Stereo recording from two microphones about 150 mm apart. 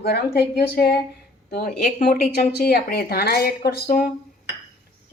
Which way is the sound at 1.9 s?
75° left (ahead or behind).